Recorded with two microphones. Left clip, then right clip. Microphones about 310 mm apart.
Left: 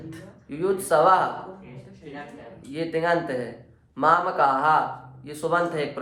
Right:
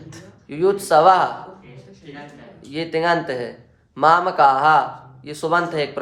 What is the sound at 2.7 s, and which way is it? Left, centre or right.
Speech, right.